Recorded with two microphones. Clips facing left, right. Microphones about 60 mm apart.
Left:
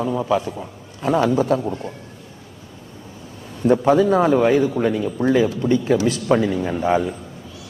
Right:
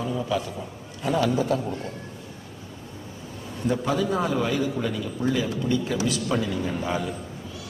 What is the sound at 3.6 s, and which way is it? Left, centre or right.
A man's voice, left.